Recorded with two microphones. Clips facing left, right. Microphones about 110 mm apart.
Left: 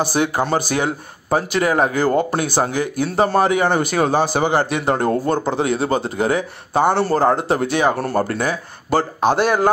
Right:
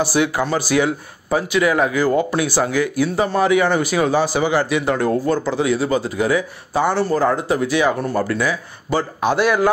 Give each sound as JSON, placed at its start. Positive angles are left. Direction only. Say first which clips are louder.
{"t": 0.0, "sound": "a man's voice", "louder": "even", "side_deg": 45}
{"t": 5.5, "sound": "a man's voice", "louder": "right 1 dB", "side_deg": 50}
{"t": 9.2, "sound": "speech", "louder": "right 1 dB", "side_deg": 35}